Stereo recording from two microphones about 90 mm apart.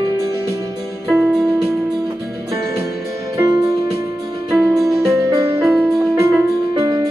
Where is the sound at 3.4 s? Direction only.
40° right (ahead or behind).